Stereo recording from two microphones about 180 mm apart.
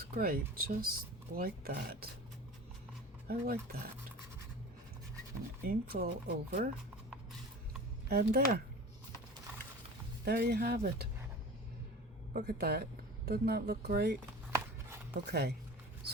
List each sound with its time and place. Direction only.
0.0 s speech: 55° right (ahead or behind)
3.2 s speech: 60° right (ahead or behind)
5.6 s speech: 60° right (ahead or behind)
8.0 s speech: 60° right (ahead or behind)
10.2 s speech: 60° right (ahead or behind)
12.3 s speech: 55° right (ahead or behind)
14.5 s a sound: 15° right (ahead or behind)
15.3 s speech: 65° right (ahead or behind)